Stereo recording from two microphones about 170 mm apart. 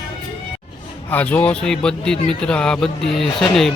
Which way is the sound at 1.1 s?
10° left (ahead or behind).